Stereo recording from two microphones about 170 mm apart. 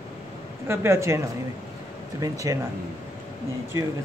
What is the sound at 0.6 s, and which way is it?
Speech, 15° right (ahead or behind).